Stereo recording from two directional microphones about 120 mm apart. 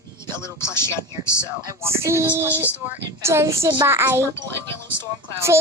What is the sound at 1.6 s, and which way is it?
Speech, 20° right (ahead or behind).